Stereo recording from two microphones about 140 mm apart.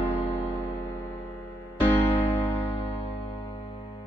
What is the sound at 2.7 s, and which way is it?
Music, 45° left (ahead or behind).